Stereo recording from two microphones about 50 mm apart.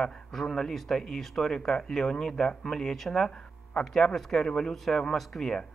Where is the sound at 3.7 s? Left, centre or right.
Centre.